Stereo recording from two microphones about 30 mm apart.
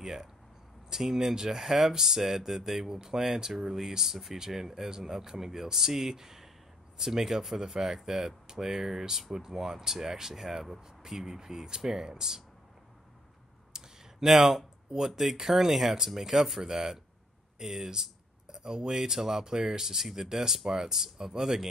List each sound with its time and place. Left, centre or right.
0.0 s speech: centre
13.7 s clicking: right
14.2 s speech: centre